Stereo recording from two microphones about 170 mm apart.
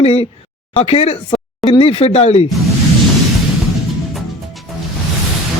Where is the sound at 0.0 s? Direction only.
35° left (ahead or behind).